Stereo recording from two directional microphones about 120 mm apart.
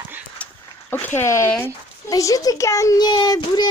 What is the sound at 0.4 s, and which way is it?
Dog, 10° left (ahead or behind).